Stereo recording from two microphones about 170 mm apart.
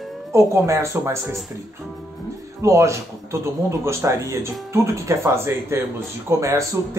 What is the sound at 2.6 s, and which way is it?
Speech, 15° right (ahead or behind).